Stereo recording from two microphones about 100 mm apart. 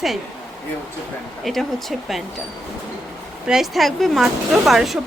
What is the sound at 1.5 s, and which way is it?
Speech, centre (ahead or behind).